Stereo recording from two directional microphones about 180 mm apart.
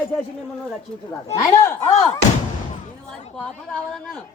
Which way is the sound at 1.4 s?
15° left (ahead or behind).